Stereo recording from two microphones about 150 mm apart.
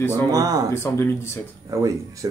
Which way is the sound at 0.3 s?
25° right (ahead or behind).